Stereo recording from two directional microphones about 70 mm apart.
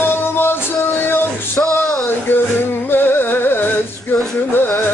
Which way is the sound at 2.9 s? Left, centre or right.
Left.